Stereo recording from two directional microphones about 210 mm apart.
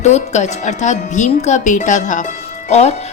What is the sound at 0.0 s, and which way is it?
A woman's voice, 35° left (ahead or behind).